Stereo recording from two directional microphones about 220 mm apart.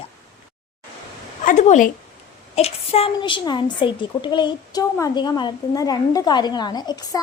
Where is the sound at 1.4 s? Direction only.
35° left (ahead or behind).